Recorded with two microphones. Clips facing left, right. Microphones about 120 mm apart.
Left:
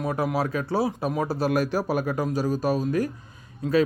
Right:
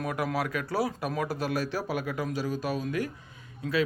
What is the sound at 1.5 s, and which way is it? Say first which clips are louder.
A man's voice: left 6 dB; 45° left (ahead or behind).